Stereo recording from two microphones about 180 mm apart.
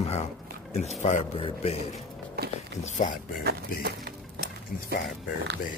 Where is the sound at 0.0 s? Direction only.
35° left (ahead or behind).